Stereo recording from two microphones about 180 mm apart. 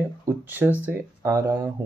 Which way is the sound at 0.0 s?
10° right (ahead or behind).